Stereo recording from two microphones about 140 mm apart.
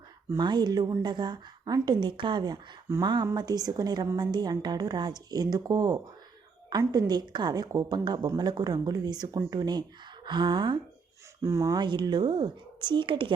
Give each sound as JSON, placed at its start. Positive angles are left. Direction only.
{"t": 0.3, "sound": "a woman's voice", "side_deg": -30}
{"t": 11.4, "sound": "a woman's voice", "side_deg": -25}